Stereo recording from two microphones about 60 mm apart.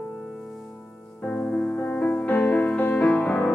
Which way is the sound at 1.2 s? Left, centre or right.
Left.